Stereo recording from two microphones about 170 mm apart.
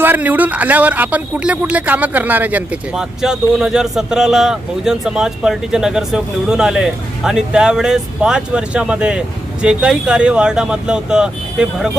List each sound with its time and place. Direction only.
0.0 s speech: 10° right (ahead or behind)